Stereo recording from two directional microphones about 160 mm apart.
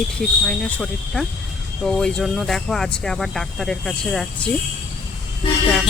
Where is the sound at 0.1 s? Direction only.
5° left (ahead or behind).